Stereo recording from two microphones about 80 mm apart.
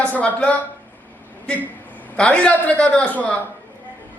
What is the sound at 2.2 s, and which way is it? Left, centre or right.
A man's voice, centre.